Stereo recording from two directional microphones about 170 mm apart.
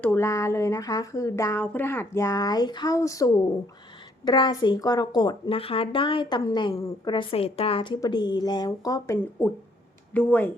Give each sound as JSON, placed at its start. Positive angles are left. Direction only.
{"t": 0.0, "sound": "speech", "side_deg": 15}
{"t": 9.4, "sound": "speech", "side_deg": 10}